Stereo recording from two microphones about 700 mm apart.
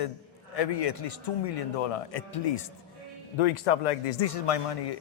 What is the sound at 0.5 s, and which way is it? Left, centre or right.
A man's voice, left.